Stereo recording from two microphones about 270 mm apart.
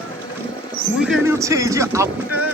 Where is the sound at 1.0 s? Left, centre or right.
Centre.